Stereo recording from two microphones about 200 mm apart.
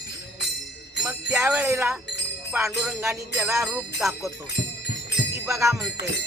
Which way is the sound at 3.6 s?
Centre (ahead or behind).